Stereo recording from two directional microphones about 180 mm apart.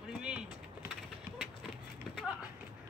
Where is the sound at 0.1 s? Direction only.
5° right (ahead or behind).